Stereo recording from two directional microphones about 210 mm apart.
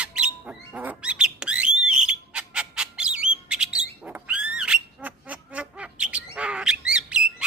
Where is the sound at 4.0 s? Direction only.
5° right (ahead or behind).